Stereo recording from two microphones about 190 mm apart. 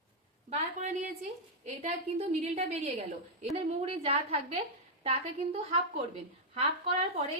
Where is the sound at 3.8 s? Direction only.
30° right (ahead or behind).